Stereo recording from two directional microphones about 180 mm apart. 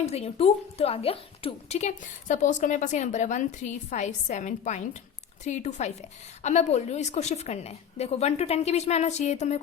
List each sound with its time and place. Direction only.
0.0 s a woman's voice: 35° left (ahead or behind)